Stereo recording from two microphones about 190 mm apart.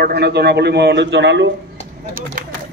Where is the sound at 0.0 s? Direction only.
60° right (ahead or behind).